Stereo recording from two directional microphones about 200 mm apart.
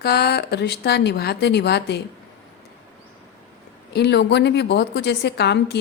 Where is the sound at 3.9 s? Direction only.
55° left (ahead or behind).